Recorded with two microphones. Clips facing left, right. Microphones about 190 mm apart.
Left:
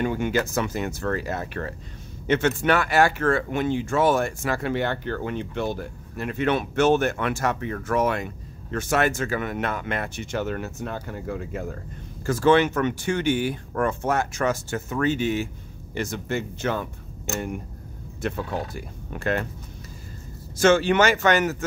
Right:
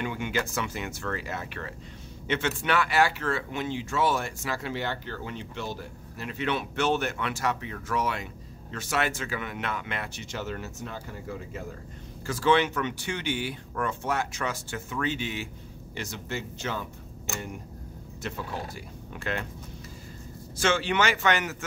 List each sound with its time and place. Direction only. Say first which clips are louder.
0.0 s speech: left 7 dB; 45° left (ahead or behind); by 11.6 s 60° left (ahead or behind)
12.3 s speech: left 5 dB; 45° left (ahead or behind)
18.2 s speech: left 7 dB; 55° left (ahead or behind)
20.5 s speech: left 8 dB; 45° left (ahead or behind)